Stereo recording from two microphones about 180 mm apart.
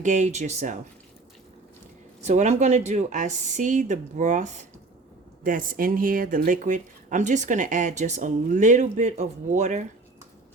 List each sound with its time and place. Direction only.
0.0 s speech: 40° right (ahead or behind)
2.2 s speech: 40° right (ahead or behind)